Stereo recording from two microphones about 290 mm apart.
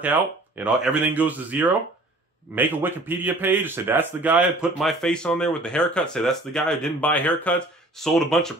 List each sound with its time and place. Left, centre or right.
0.6 s a man's voice: centre